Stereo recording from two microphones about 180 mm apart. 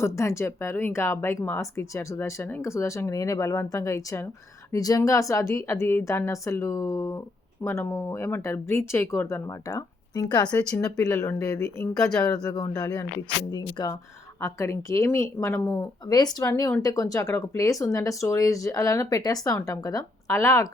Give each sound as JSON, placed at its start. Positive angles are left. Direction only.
{"t": 0.0, "sound": "speech", "side_deg": 15}
{"t": 10.5, "sound": "speech", "side_deg": 10}